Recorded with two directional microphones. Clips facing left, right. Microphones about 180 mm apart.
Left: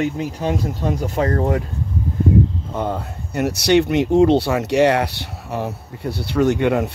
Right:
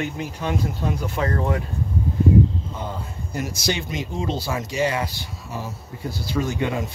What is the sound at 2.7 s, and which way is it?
Speech, 65° left (ahead or behind).